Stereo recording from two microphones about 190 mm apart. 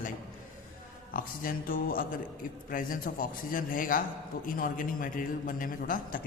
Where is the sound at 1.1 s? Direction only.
50° left (ahead or behind).